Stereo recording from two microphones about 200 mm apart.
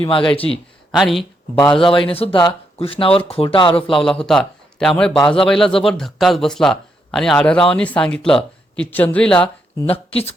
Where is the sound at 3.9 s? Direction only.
Centre (ahead or behind).